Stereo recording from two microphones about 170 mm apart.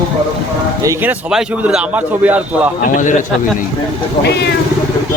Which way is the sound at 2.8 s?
50° left (ahead or behind).